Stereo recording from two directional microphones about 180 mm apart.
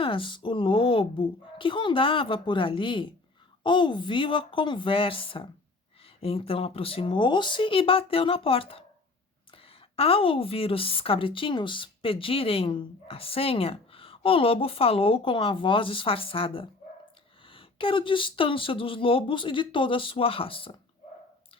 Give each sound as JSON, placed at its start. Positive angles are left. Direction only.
{"t": 0.0, "sound": "a woman's voice", "side_deg": 30}